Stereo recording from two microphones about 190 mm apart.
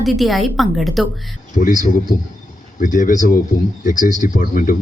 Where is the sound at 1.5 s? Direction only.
40° left (ahead or behind).